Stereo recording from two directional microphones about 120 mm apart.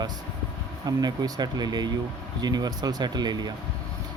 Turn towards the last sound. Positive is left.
turn(degrees=-35)  # may be behind; listen again after turning